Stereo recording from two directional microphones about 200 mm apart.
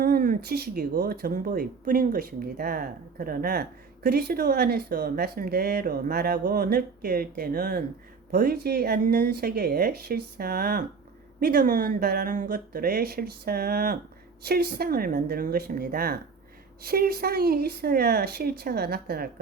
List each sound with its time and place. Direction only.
0.0 s speech: 45° right (ahead or behind)